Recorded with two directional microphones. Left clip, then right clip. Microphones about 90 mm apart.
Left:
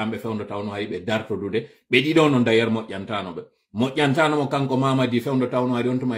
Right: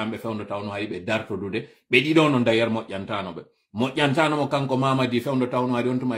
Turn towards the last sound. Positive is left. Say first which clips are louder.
# left 1 dB
turn(degrees=-30)  # may be behind; listen again after turning